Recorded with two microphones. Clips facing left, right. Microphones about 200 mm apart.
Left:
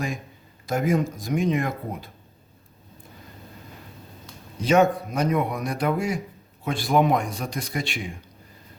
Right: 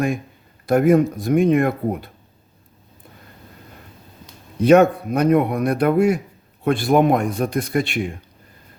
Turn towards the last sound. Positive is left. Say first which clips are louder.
# right 9 dB
turn(degrees=-55)  # may be behind; listen again after turning